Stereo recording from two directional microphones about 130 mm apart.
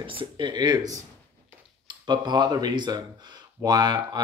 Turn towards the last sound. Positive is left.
turn(degrees=-30)  # may be behind; listen again after turning